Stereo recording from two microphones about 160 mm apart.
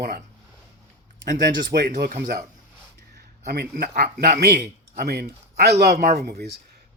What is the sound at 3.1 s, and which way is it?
A man's voice, 85° right.